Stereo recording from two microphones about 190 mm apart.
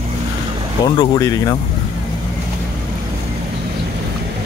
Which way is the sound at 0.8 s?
20° left (ahead or behind).